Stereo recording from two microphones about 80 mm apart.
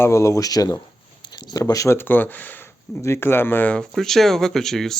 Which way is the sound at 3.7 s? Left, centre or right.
Centre.